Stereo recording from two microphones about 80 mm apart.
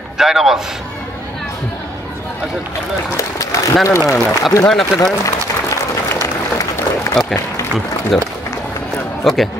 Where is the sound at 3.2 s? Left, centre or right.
Left.